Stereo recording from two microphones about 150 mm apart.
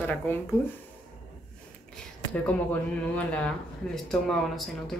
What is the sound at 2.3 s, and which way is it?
Speech, 10° left (ahead or behind).